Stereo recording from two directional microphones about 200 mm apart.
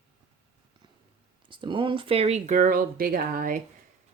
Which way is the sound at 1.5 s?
25° right (ahead or behind).